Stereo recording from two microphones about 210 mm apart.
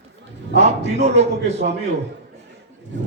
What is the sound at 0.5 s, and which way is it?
A man's voice, 30° right (ahead or behind).